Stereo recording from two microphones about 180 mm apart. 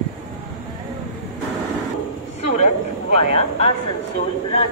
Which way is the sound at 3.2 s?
35° left (ahead or behind).